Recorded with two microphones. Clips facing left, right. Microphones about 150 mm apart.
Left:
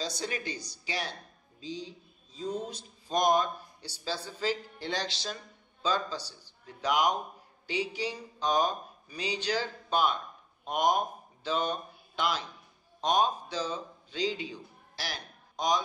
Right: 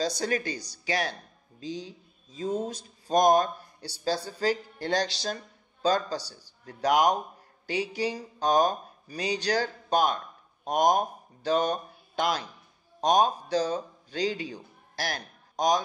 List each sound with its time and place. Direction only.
0.2 s a man's voice: 45° right (ahead or behind)